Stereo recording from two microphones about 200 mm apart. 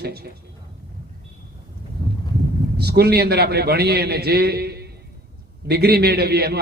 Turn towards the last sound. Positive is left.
turn(degrees=-50)  # may be behind; listen again after turning